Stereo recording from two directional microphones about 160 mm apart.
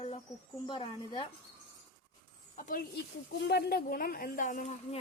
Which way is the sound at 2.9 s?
90° left.